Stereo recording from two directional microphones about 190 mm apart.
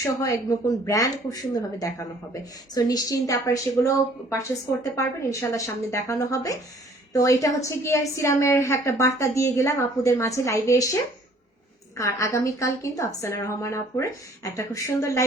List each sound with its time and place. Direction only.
0.0 s a woman's voice: 15° left (ahead or behind)
4.8 s a woman's voice: 15° left (ahead or behind)
11.9 s a woman's voice: 15° left (ahead or behind)